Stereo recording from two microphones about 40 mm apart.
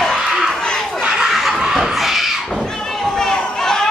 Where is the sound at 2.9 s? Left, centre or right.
Centre.